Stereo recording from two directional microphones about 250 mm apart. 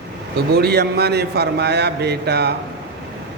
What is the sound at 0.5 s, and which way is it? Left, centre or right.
A man's voice, right.